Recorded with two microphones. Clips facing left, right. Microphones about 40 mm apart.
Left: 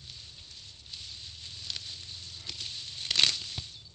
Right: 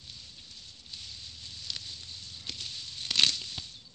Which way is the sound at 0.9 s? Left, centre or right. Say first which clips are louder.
Even; left.